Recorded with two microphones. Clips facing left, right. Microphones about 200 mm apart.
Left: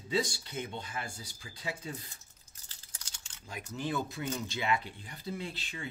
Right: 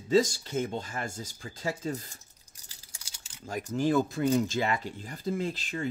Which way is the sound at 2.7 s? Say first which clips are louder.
Right 1 dB; 10° right (ahead or behind).